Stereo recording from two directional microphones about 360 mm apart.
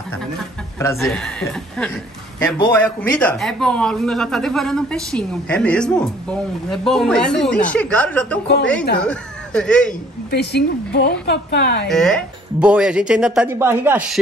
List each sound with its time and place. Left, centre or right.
0.7 s speech: centre
10.3 s speech: left
11.9 s speech: centre